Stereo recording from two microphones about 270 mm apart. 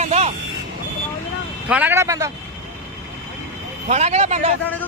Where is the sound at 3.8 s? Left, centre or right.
Right.